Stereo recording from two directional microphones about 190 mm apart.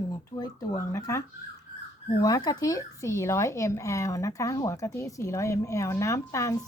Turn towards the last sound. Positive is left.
turn(degrees=15)  # may be behind; listen again after turning